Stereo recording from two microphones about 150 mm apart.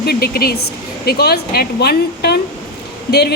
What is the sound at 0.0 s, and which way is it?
A woman's voice, 90° left.